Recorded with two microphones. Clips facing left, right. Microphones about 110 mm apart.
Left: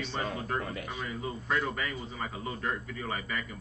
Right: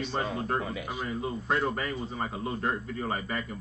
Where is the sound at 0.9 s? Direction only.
35° right (ahead or behind).